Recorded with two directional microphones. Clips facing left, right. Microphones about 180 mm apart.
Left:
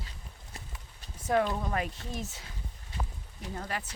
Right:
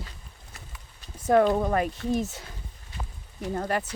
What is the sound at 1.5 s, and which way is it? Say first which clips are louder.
Speech: right 8 dB; 50° right (ahead or behind).